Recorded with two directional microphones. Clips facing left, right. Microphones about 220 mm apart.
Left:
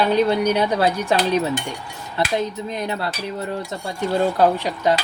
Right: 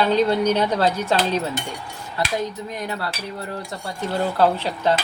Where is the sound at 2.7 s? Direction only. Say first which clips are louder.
Left 3 dB; 25° left (ahead or behind).